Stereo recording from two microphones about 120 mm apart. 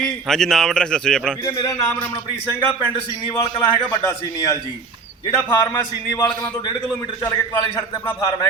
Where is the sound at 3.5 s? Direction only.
30° left (ahead or behind).